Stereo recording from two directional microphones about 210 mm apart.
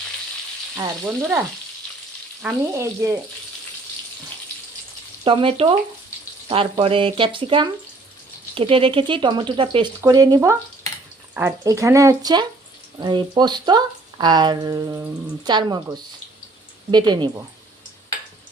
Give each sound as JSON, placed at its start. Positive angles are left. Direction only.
{"t": 1.0, "sound": "speech", "side_deg": -10}
{"t": 5.2, "sound": "speech", "side_deg": -25}